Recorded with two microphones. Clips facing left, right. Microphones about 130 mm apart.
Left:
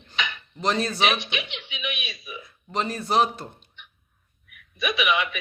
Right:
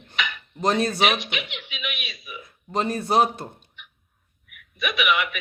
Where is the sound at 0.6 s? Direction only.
50° right (ahead or behind).